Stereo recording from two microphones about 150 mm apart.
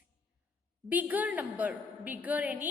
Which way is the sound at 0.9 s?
10° right (ahead or behind).